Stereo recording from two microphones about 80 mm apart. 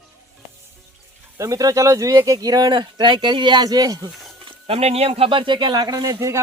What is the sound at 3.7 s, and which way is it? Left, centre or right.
Speech, right.